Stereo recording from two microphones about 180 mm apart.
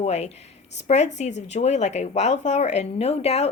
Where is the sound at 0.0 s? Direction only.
35° left (ahead or behind).